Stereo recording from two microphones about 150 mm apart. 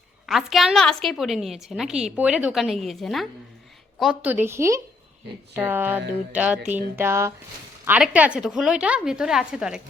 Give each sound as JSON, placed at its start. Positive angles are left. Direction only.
{"t": 0.3, "sound": "a woman's voice", "side_deg": 0}